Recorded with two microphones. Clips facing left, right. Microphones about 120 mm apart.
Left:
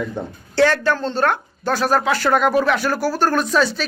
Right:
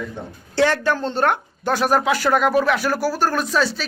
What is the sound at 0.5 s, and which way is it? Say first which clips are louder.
Speech: left 2 dB; 15° right (ahead or behind).